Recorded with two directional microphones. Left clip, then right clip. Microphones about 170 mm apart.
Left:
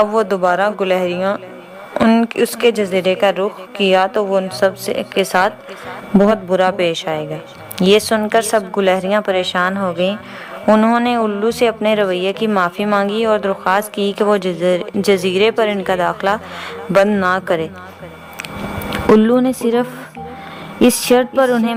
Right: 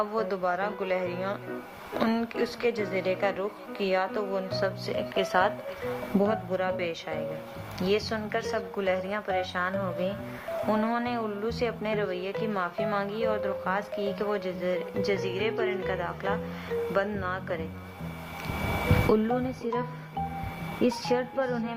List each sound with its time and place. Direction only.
0.0 s speech: 30° left (ahead or behind)
6.2 s speech: 35° left (ahead or behind)
19.2 s speech: 40° left (ahead or behind)
20.8 s speech: 40° left (ahead or behind)